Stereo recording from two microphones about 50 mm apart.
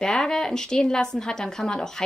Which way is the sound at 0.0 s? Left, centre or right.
Centre.